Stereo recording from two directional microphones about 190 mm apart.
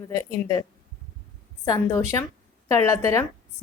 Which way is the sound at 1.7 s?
15° left (ahead or behind).